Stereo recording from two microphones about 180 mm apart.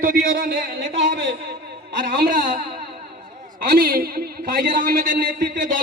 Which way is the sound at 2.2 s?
50° right (ahead or behind).